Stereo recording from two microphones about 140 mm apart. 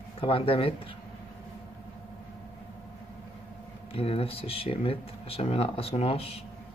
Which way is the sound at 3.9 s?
45° left (ahead or behind).